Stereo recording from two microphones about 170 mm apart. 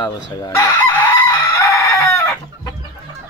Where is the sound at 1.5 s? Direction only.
15° left (ahead or behind).